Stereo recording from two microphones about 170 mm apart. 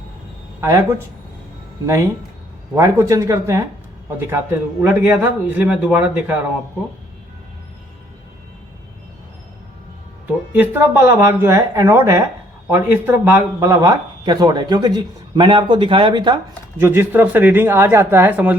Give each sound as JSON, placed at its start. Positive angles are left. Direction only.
{"t": 0.6, "sound": "speech", "side_deg": -15}
{"t": 2.7, "sound": "speech", "side_deg": -15}
{"t": 10.5, "sound": "speech", "side_deg": -10}
{"t": 16.7, "sound": "speech", "side_deg": -15}